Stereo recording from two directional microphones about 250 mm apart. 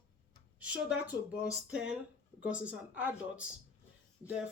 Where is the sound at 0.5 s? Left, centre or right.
Centre.